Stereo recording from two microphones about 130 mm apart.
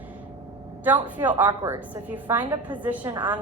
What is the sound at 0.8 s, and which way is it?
A woman's voice, 15° right (ahead or behind).